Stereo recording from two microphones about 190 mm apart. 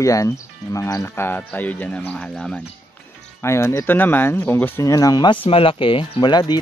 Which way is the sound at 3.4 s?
15° left (ahead or behind).